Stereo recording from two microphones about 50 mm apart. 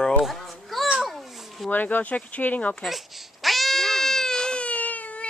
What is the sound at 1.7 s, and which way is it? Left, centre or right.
Speech, left.